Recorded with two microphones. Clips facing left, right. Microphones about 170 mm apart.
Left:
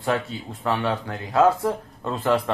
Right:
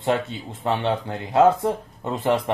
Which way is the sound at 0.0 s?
25° right (ahead or behind).